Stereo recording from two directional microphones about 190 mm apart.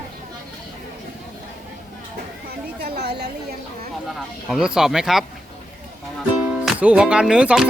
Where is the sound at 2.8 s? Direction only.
60° right (ahead or behind).